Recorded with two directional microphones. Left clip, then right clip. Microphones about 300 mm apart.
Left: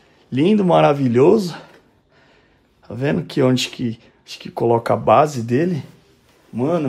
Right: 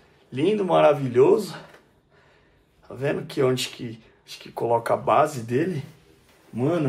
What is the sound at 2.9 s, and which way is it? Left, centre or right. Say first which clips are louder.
Speech: left 5 dB; left.